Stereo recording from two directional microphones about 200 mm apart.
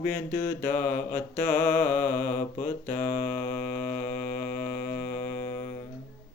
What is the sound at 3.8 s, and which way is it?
Mantra, 40° left (ahead or behind).